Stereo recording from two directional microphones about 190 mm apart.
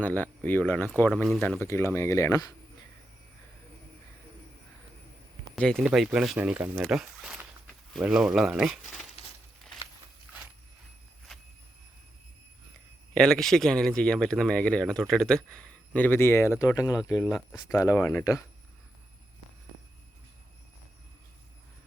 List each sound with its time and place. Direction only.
0.0 s speech: 10° left (ahead or behind)
1.5 s speech: 15° left (ahead or behind)
5.5 s speech: 5° left (ahead or behind)
13.1 s speech: centre (ahead or behind)
17.2 s speech: centre (ahead or behind)
17.7 s speech: 15° left (ahead or behind)